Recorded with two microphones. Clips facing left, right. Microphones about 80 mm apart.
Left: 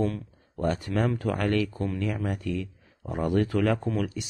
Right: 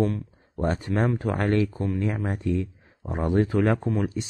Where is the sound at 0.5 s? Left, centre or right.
Right.